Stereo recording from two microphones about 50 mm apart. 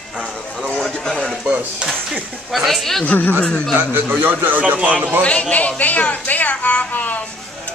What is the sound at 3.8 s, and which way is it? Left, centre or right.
Speech, right.